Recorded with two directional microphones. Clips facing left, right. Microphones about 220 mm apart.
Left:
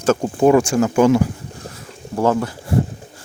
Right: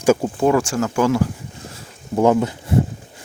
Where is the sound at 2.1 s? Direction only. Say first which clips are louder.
Right 2 dB; 20° right (ahead or behind).